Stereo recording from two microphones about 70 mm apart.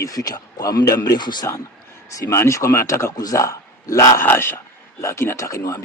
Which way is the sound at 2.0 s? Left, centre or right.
Left.